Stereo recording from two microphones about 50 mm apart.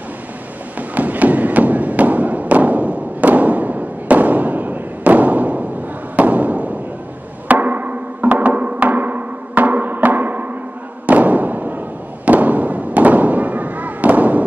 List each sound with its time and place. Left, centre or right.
0.7 s thump: right
6.1 s fireworks: right
7.4 s music: right
11.1 s fireworks: right